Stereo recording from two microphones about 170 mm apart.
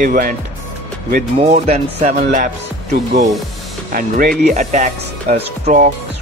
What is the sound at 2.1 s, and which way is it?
Speech, 60° right (ahead or behind).